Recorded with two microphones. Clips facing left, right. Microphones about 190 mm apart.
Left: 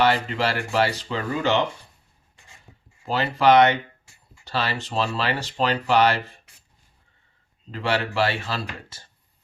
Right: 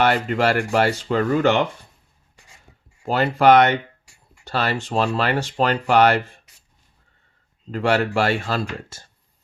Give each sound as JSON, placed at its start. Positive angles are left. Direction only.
{"t": 0.0, "sound": "speech", "side_deg": -50}
{"t": 3.0, "sound": "speech", "side_deg": -50}
{"t": 7.7, "sound": "speech", "side_deg": -45}